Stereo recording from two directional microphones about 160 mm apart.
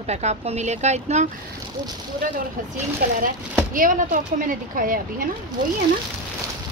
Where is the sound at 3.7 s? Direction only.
60° right (ahead or behind).